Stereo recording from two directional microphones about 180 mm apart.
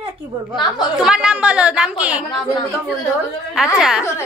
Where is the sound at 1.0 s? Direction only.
5° right (ahead or behind).